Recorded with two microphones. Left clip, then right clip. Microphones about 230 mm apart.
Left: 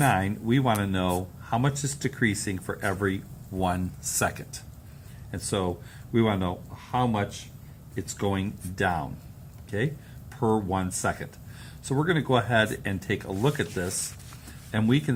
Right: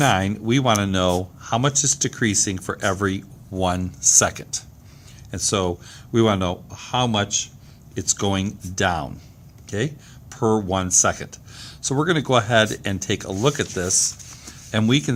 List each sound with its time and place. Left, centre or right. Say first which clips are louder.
0.0 s speech: right 5 dB; right